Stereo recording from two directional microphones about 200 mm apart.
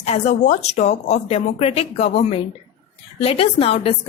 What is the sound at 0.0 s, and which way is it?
A woman's voice, 35° left (ahead or behind).